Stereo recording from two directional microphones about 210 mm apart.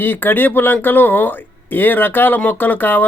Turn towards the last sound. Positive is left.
turn(degrees=10)  # may be behind; listen again after turning